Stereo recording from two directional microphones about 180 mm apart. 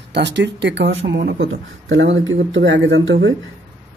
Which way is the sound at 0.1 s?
75° right (ahead or behind).